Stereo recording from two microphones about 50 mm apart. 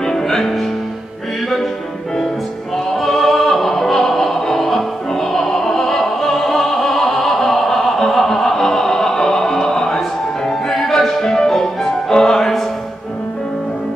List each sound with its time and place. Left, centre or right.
0.0 s music: centre
2.9 s music: centre